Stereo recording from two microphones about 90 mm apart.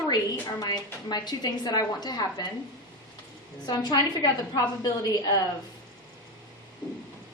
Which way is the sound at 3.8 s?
45° left (ahead or behind).